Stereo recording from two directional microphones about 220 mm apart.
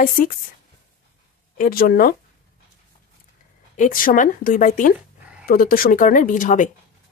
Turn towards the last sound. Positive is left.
turn(degrees=35)  # may be behind; listen again after turning